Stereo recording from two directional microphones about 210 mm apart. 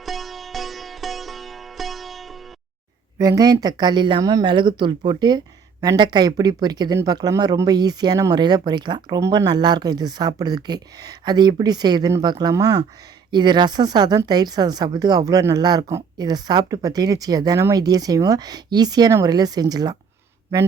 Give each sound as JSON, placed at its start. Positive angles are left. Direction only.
{"t": 0.0, "sound": "sitar", "side_deg": 0}
{"t": 3.2, "sound": "speech", "side_deg": -15}